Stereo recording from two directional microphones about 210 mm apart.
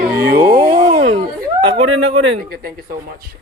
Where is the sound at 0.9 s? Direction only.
30° right (ahead or behind).